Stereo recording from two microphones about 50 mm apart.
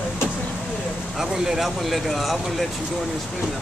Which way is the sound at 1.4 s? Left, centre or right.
Centre.